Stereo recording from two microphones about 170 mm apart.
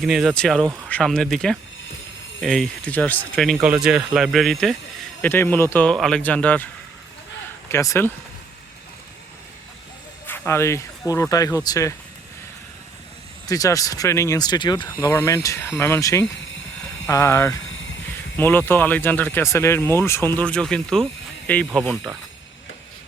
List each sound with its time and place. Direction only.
0.0 s speech: centre (ahead or behind)
7.7 s speech: 15° left (ahead or behind)
10.2 s speech: 15° left (ahead or behind)
13.5 s speech: 20° left (ahead or behind)
14.8 s speech: 15° left (ahead or behind)